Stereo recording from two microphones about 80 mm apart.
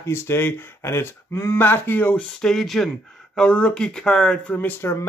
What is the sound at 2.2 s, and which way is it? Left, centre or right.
Speech, centre.